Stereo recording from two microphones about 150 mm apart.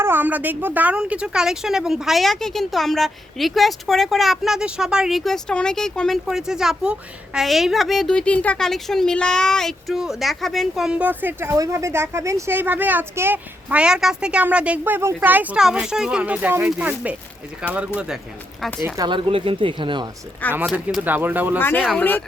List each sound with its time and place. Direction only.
0.0 s a woman's voice: 15° right (ahead or behind)
18.9 s speech: 30° right (ahead or behind)
20.5 s a woman's voice: 10° right (ahead or behind)
21.6 s speech: 15° left (ahead or behind)